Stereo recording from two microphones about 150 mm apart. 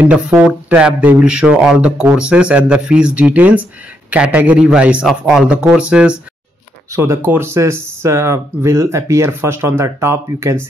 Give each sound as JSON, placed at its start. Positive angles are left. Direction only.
{"t": 0.0, "sound": "speech", "side_deg": -5}
{"t": 6.9, "sound": "speech", "side_deg": -20}